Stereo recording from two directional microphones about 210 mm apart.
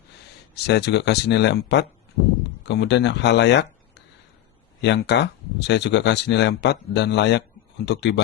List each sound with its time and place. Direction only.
0.5 s speech: 55° left (ahead or behind)